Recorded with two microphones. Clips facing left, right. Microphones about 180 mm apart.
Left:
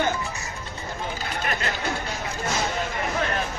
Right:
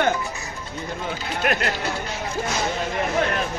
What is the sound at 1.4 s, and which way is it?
Speech, 65° right (ahead or behind).